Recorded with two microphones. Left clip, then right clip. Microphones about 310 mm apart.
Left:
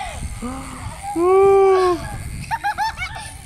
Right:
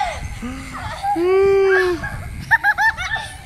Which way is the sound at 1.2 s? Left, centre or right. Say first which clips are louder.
Left 3 dB; centre.